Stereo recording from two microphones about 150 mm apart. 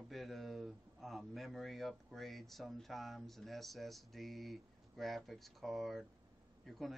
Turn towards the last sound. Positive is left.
turn(degrees=0)  # may be behind; listen again after turning